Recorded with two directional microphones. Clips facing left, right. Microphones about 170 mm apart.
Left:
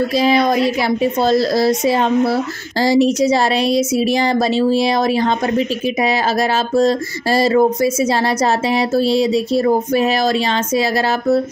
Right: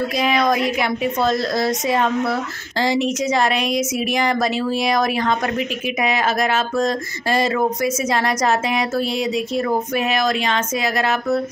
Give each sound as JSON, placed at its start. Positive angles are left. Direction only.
{"t": 0.1, "sound": "a woman's voice", "side_deg": 30}